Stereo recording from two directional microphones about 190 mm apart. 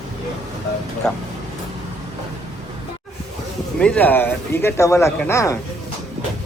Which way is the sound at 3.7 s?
5° left (ahead or behind).